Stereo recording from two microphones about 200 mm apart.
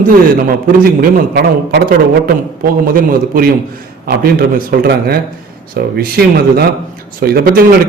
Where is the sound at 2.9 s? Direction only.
45° right (ahead or behind).